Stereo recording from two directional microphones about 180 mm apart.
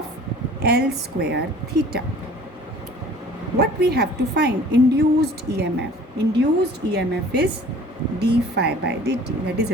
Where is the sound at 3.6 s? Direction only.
65° right (ahead or behind).